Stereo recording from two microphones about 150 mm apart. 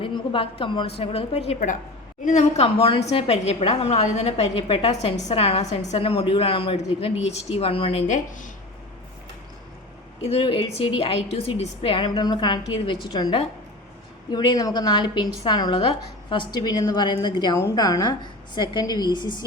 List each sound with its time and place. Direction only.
0.0 s a woman's voice: 35° left (ahead or behind); by 8.4 s 55° left (ahead or behind)
10.2 s a woman's voice: 35° left (ahead or behind)
14.3 s a woman's voice: 30° left (ahead or behind)